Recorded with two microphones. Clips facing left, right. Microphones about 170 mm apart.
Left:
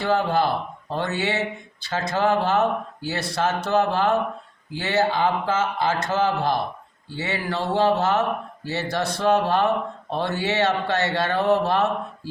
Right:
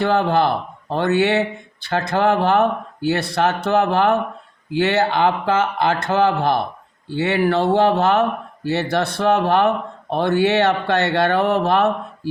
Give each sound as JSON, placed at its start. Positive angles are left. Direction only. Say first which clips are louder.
{"t": 0.0, "sound": "speech", "louder": "right 4 dB", "side_deg": -60}